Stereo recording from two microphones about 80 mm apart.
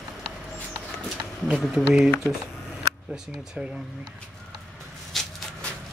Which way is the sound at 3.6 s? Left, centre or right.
Centre.